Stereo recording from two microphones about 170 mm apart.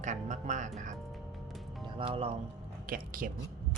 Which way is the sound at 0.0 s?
45° right (ahead or behind).